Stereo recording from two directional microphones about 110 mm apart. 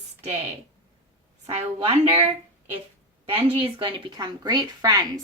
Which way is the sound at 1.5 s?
65° right (ahead or behind).